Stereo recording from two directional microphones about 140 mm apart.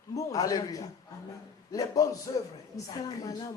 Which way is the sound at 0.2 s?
25° left (ahead or behind).